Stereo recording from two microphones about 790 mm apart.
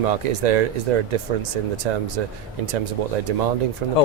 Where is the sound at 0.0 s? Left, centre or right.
Right.